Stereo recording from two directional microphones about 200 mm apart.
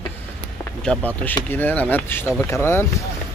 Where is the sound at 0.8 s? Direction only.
5° left (ahead or behind).